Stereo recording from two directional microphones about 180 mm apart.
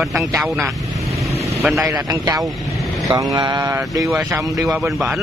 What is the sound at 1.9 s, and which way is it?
A man's voice, 20° right (ahead or behind).